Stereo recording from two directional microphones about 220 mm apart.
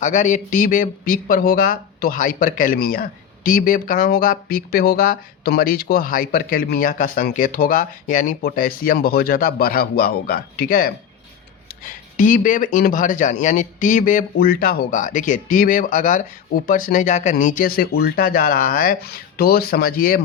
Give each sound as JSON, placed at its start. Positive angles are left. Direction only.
{"t": 0.0, "sound": "speech", "side_deg": 35}